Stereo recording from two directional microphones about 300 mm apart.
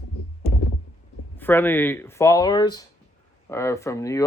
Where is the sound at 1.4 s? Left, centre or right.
Centre.